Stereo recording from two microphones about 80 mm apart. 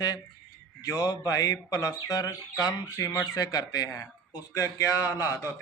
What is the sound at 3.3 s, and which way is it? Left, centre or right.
Speech, left.